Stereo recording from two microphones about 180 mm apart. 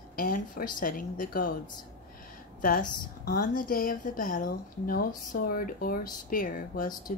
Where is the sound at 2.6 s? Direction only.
50° left (ahead or behind).